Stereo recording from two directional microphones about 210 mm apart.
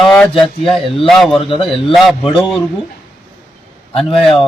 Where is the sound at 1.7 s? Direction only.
Centre (ahead or behind).